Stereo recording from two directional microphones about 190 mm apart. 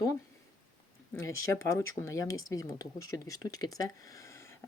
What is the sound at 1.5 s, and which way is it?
Speech, 15° left (ahead or behind).